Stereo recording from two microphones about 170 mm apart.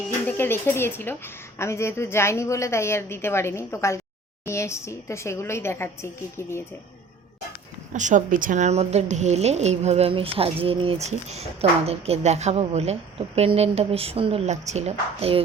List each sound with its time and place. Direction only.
0.3 s a woman's voice: 15° left (ahead or behind)
7.9 s a woman's voice: 50° right (ahead or behind)